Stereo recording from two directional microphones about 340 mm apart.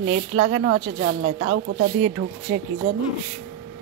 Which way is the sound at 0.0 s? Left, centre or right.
Right.